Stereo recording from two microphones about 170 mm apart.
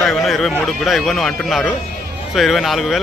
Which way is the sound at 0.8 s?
Centre (ahead or behind).